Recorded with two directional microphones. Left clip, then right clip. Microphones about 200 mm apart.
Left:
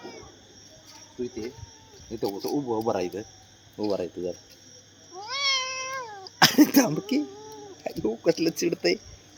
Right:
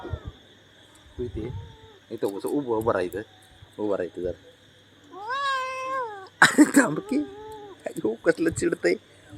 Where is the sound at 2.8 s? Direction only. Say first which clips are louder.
Right 3 dB; 20° left (ahead or behind).